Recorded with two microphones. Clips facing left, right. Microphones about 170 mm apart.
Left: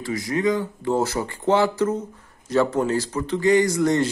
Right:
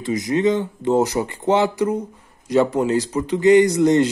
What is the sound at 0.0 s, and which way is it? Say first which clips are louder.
Speech: right 4 dB; 20° right (ahead or behind).